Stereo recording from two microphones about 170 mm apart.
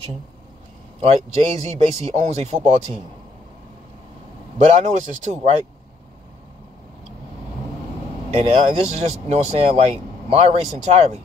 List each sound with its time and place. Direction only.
1.0 s speech: 35° right (ahead or behind)
4.7 s speech: 40° right (ahead or behind)
8.3 s speech: 35° right (ahead or behind)